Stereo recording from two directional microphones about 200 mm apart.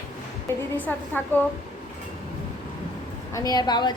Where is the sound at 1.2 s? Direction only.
10° left (ahead or behind).